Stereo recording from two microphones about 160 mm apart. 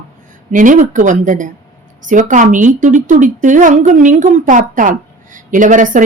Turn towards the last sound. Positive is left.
turn(degrees=-55)  # may be behind; listen again after turning